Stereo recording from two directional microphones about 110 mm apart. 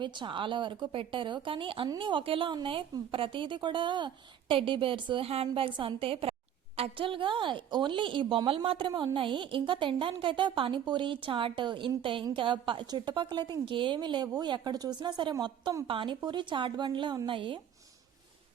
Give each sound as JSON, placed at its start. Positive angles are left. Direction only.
{"t": 0.0, "sound": "a woman's voice", "side_deg": -45}